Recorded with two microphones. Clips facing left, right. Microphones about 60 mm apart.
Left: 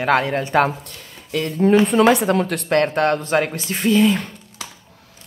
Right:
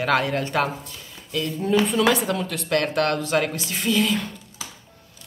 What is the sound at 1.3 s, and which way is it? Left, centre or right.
Speech, left.